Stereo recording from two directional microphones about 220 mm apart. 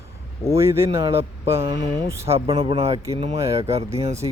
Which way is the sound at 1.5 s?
25° right (ahead or behind).